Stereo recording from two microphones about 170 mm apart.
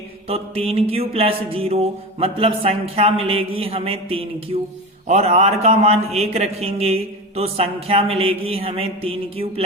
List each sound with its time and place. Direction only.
0.3 s a man's voice: 35° right (ahead or behind)